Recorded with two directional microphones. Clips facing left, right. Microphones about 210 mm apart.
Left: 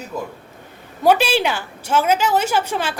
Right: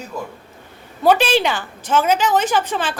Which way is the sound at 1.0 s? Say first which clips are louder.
Right 1 dB; 10° left (ahead or behind).